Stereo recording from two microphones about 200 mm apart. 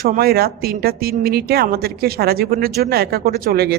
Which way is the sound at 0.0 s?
50° right (ahead or behind).